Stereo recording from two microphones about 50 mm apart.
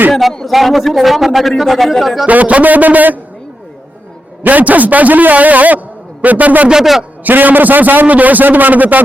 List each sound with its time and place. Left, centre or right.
0.1 s speech: centre
2.2 s a man's voice: right
4.4 s a man's voice: right
6.7 s a man's voice: centre
7.3 s a man's voice: right